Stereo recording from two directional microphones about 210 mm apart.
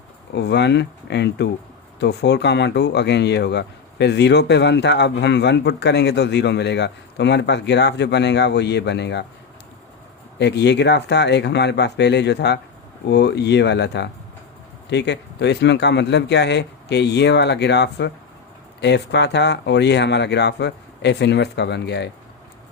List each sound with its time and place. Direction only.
0.3 s speech: 55° left (ahead or behind)
10.3 s speech: 55° left (ahead or behind)